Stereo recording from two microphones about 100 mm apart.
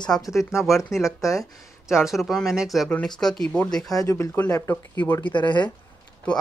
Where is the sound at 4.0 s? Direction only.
35° left (ahead or behind).